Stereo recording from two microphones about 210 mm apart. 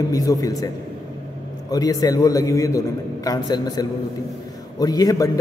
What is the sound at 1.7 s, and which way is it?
A man's voice, 15° left (ahead or behind).